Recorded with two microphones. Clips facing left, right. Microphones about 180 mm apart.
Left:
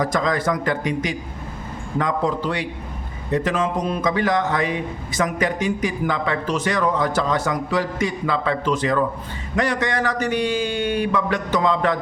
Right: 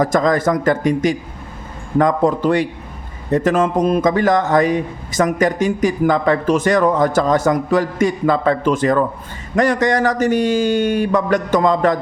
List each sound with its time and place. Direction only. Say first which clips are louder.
0.0 s a man's voice: right 6 dB; 45° right (ahead or behind)